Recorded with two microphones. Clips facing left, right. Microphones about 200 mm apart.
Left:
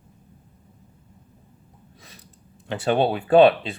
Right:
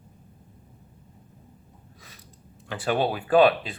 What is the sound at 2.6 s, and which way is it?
Speech, 25° left (ahead or behind).